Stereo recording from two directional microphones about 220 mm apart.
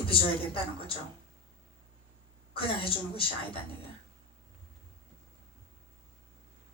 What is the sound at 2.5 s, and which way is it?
A woman's voice, 25° left (ahead or behind).